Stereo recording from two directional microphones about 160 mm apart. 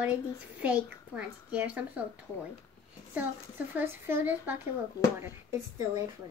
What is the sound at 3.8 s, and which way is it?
Speech, 15° right (ahead or behind).